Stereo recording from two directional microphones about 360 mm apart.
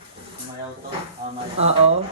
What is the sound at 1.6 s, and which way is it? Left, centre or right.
Speech, centre.